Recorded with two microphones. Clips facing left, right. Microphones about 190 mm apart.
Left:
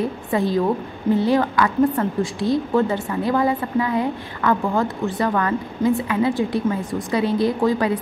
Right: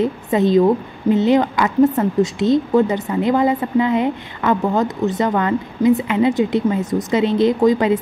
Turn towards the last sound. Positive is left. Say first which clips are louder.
# right 5 dB
turn(degrees=-20)  # may be behind; listen again after turning